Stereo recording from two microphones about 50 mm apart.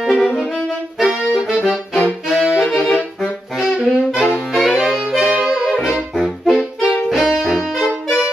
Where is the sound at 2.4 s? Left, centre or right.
Centre.